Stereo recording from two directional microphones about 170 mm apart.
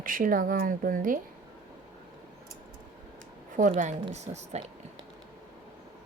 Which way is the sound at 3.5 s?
45° right (ahead or behind).